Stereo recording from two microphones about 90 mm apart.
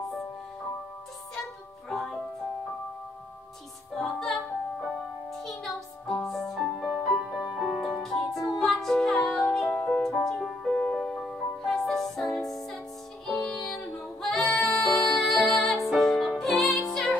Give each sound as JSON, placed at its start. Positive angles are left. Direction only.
{"t": 1.9, "sound": "music", "side_deg": 5}
{"t": 3.9, "sound": "music", "side_deg": 5}
{"t": 10.0, "sound": "music", "side_deg": 5}